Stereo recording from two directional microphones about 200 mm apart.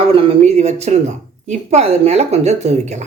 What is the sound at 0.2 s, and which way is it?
Speech, 30° right (ahead or behind).